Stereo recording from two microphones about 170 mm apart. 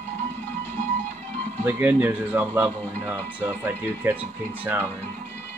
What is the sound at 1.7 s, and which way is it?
Speech, 10° right (ahead or behind).